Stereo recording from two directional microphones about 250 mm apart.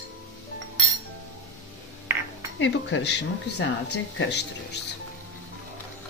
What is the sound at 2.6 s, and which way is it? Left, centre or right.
Speech, left.